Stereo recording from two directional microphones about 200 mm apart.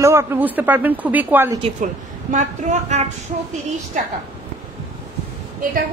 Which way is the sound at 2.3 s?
35° right (ahead or behind).